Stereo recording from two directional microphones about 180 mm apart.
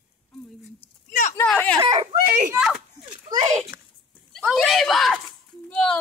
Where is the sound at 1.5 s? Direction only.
5° left (ahead or behind).